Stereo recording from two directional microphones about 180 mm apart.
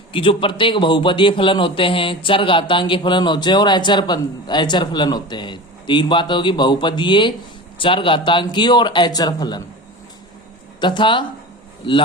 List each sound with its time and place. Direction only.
0.1 s a man's voice: 30° left (ahead or behind)
10.8 s a man's voice: 25° left (ahead or behind)